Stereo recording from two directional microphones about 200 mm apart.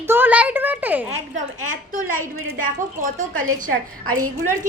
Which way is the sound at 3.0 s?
40° right (ahead or behind).